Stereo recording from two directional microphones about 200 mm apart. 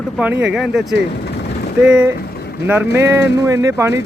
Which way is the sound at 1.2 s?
55° left (ahead or behind).